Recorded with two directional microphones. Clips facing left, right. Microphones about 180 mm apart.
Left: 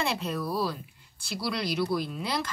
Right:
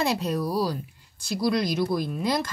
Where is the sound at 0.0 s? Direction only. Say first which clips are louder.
Right 5 dB; 40° right (ahead or behind).